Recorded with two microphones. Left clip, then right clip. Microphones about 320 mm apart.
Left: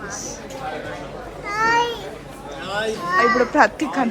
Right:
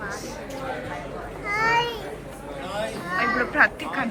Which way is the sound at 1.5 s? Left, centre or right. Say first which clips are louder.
Left 3 dB; left.